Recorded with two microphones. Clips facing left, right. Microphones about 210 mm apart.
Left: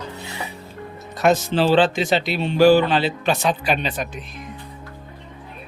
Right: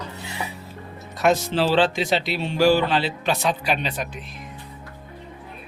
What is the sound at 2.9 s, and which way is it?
Speech, centre (ahead or behind).